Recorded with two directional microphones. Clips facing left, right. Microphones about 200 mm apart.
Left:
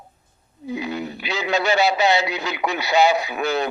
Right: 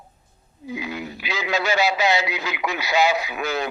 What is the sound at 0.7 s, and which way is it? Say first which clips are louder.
Speech: left 3 dB; 35° left (ahead or behind).